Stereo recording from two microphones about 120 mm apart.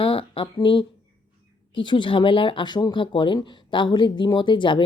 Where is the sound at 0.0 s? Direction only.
50° left (ahead or behind).